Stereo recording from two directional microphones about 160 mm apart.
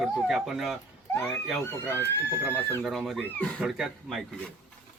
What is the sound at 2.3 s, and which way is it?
Speech, 10° right (ahead or behind).